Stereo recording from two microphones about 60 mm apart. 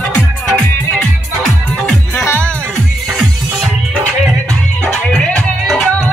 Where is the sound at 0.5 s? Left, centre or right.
Centre.